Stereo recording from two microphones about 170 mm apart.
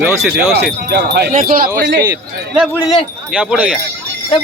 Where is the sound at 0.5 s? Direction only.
75° right (ahead or behind).